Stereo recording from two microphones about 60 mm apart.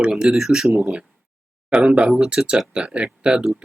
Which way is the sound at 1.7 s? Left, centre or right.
Centre.